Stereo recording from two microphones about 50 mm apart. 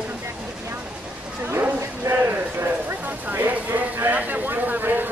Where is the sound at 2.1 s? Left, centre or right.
Right.